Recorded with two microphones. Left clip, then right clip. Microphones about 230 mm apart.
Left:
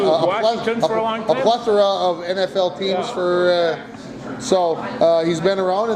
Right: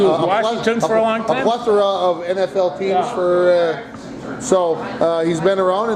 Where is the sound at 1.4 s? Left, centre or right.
Left.